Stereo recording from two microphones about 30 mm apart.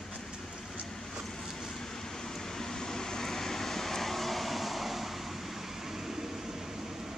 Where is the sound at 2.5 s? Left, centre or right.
Centre.